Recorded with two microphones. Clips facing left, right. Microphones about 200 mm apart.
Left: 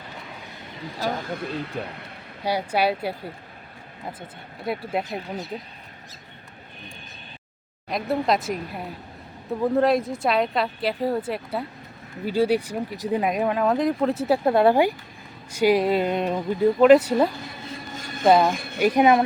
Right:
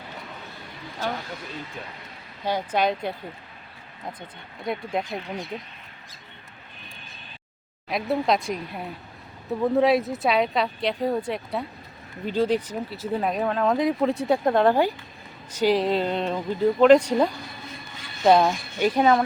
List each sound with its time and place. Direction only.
1.3 s speech: 60° left (ahead or behind)
2.4 s speech: 10° left (ahead or behind)
4.6 s a woman's voice: 5° left (ahead or behind)
7.9 s a woman's voice: centre (ahead or behind)
17.9 s a sound: 45° left (ahead or behind)
18.2 s speech: centre (ahead or behind)
18.8 s speech: 15° left (ahead or behind)